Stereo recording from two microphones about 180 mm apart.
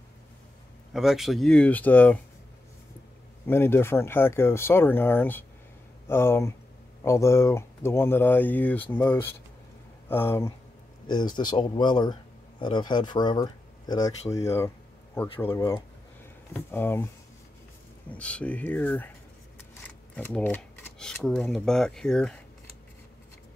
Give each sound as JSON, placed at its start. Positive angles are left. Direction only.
{"t": 0.9, "sound": "speech", "side_deg": 0}
{"t": 3.4, "sound": "speech", "side_deg": 15}
{"t": 11.1, "sound": "speech", "side_deg": 25}
{"t": 18.1, "sound": "speech", "side_deg": 5}
{"t": 20.2, "sound": "speech", "side_deg": 10}